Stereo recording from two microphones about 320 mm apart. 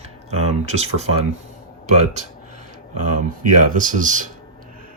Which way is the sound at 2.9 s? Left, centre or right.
Right.